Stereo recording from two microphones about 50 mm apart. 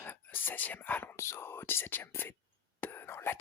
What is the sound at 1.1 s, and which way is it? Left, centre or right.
Speech, left.